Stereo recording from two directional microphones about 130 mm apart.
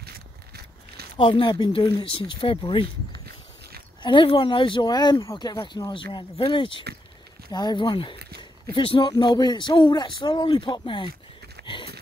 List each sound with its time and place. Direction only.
1.1 s speech: 40° left (ahead or behind)
4.0 s speech: 40° left (ahead or behind)
11.6 s a sound: 40° left (ahead or behind)